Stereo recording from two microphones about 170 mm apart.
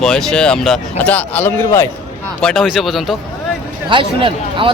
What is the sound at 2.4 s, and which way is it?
Speech, centre (ahead or behind).